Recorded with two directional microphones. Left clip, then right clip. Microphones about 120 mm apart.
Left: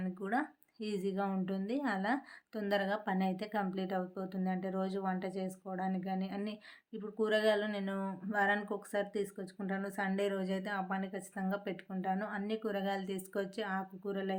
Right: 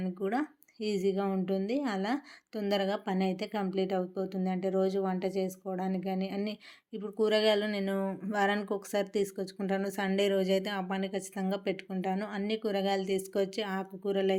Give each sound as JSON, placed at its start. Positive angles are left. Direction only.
{"t": 0.0, "sound": "speech", "side_deg": -15}